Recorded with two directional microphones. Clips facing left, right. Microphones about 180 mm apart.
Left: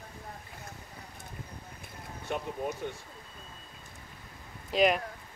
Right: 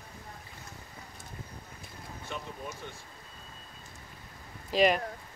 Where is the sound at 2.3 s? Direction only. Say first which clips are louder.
Left 6 dB; 50° left (ahead or behind).